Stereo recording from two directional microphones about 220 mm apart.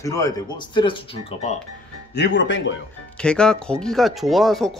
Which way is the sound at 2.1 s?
55° left (ahead or behind).